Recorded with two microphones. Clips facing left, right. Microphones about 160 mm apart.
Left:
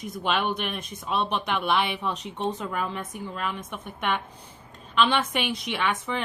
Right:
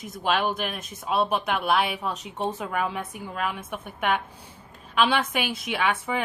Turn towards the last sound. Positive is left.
turn(degrees=-10)  # may be behind; listen again after turning